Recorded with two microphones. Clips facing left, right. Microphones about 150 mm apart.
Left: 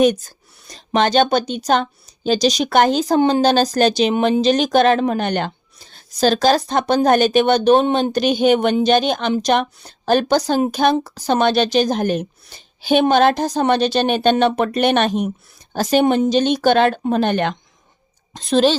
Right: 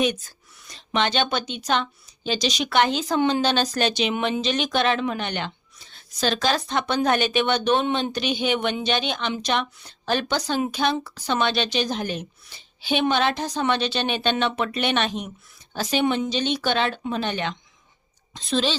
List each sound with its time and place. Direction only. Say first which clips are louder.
0.0 s speech: left 9 dB; 40° left (ahead or behind)